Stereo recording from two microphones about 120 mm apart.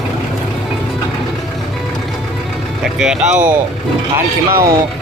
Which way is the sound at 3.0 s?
5° right (ahead or behind).